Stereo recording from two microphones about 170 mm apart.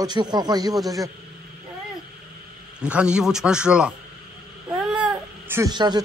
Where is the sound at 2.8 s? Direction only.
5° right (ahead or behind).